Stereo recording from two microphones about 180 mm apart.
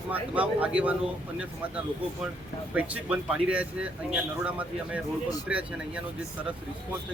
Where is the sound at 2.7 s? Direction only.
5° right (ahead or behind).